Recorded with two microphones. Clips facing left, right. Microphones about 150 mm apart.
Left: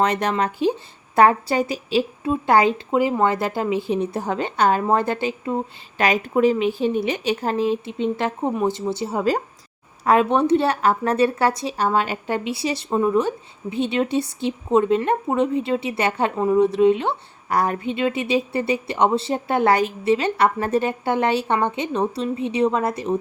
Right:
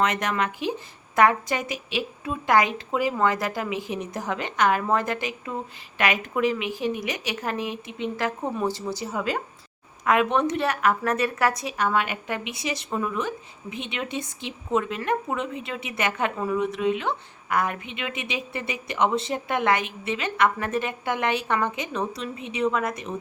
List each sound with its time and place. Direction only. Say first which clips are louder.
0.0 s a woman's voice: left 4 dB; 30° left (ahead or behind)